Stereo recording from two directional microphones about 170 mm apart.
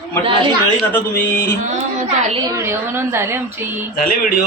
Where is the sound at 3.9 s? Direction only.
55° left (ahead or behind).